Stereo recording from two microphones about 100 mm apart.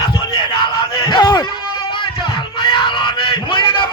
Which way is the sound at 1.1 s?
45° left (ahead or behind).